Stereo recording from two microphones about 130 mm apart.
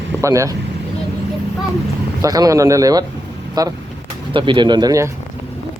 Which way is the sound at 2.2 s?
30° right (ahead or behind).